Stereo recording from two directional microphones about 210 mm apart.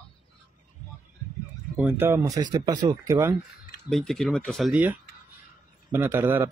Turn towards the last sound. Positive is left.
turn(degrees=-10)  # may be behind; listen again after turning